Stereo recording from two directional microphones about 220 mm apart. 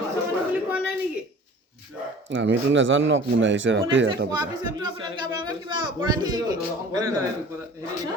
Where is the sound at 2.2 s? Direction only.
60° right (ahead or behind).